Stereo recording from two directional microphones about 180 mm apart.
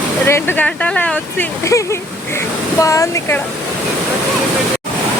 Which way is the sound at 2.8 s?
20° left (ahead or behind).